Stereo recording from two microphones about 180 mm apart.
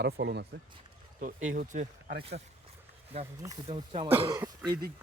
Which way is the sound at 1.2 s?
45° right (ahead or behind).